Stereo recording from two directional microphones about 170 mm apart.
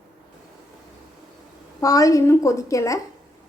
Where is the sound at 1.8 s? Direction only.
20° left (ahead or behind).